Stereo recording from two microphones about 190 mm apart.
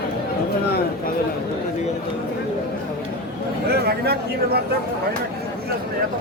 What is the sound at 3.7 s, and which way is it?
Speech, 55° right (ahead or behind).